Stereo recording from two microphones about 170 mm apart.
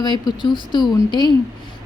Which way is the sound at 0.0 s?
25° left (ahead or behind).